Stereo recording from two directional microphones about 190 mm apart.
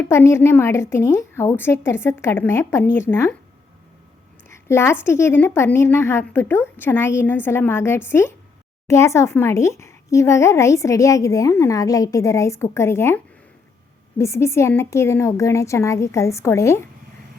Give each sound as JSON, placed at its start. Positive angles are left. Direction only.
{"t": 0.0, "sound": "a woman's voice", "side_deg": 10}
{"t": 4.4, "sound": "a sound", "side_deg": 15}
{"t": 5.0, "sound": "a woman's voice", "side_deg": 15}